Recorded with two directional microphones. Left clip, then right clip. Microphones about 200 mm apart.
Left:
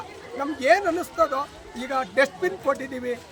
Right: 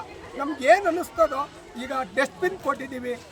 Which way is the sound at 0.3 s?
Centre (ahead or behind).